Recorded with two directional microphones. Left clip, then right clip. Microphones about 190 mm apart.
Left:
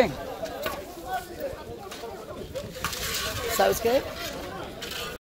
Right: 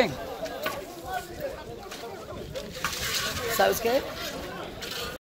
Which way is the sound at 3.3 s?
40° left (ahead or behind).